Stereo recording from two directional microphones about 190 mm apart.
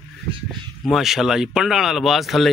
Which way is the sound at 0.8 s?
Centre (ahead or behind).